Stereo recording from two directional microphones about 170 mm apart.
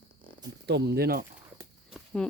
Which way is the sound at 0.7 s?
80° right.